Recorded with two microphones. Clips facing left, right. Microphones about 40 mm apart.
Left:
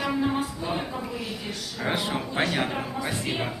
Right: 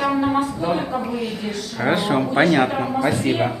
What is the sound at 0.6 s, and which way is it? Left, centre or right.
Speech, right.